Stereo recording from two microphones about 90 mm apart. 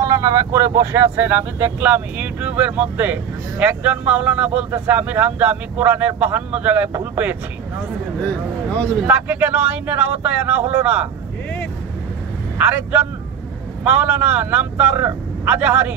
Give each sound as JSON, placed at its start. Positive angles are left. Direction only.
{"t": 0.0, "sound": "speech", "side_deg": -40}
{"t": 9.0, "sound": "speech", "side_deg": -20}
{"t": 12.5, "sound": "speech", "side_deg": -15}